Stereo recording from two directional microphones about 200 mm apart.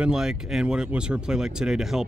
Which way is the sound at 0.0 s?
5° right (ahead or behind).